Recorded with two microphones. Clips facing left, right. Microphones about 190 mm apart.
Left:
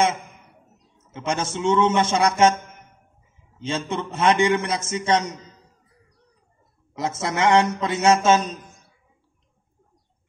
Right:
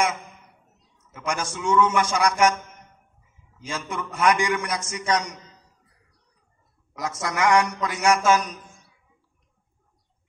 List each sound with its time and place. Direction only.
0.9 s a man's voice: 25° left (ahead or behind)
7.0 s a man's voice: 25° left (ahead or behind)